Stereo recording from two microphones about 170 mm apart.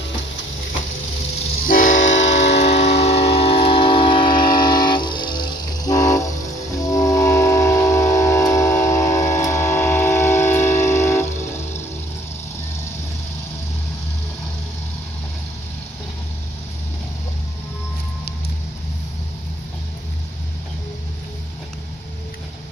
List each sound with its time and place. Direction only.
1.7 s train: 50° left (ahead or behind); by 6.3 s 20° left (ahead or behind)
6.9 s music: 20° left (ahead or behind)
9.3 s a sound: 15° left (ahead or behind)